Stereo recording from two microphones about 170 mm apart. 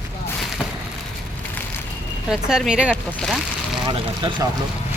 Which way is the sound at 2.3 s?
5° right (ahead or behind).